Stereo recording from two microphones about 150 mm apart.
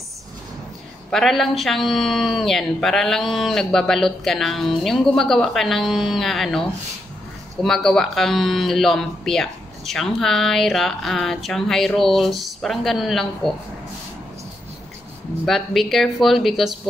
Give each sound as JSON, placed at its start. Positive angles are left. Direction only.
{"t": 1.1, "sound": "speech", "side_deg": 0}
{"t": 7.6, "sound": "speech", "side_deg": 0}
{"t": 15.4, "sound": "speech", "side_deg": 0}